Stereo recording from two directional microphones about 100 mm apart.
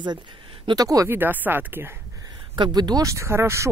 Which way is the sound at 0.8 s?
35° right (ahead or behind).